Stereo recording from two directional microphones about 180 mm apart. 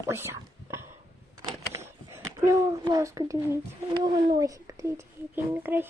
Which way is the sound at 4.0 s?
25° right (ahead or behind).